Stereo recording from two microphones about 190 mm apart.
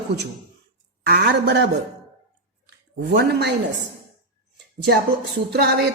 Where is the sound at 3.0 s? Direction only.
60° right (ahead or behind).